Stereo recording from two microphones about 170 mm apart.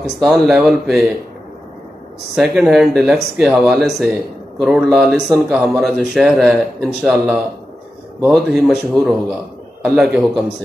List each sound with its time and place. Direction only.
0.2 s speech: centre (ahead or behind)
2.3 s speech: 5° right (ahead or behind)